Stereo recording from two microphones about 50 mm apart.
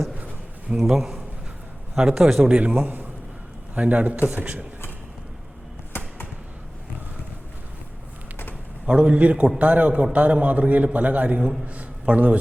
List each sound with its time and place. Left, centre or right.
0.8 s a man's voice: centre
2.4 s a man's voice: right
2.7 s a man's voice: right
5.9 s a sound: left
8.9 s a man's voice: right